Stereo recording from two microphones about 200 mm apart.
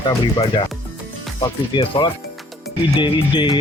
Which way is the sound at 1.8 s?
25° left (ahead or behind).